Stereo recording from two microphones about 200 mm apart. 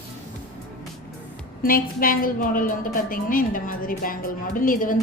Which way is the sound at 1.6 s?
45° left (ahead or behind).